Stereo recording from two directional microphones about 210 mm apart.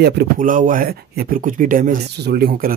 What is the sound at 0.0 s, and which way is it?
Speech, 45° right (ahead or behind).